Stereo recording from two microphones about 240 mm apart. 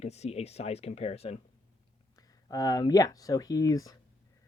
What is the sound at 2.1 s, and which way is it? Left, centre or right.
Speech, centre.